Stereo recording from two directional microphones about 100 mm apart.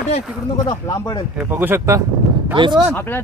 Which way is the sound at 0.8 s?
40° left (ahead or behind).